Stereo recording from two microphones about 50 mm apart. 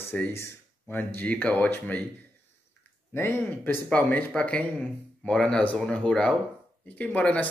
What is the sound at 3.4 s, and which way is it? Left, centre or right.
Speech, left.